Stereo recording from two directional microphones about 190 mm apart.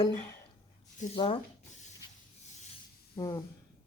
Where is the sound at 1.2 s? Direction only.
25° left (ahead or behind).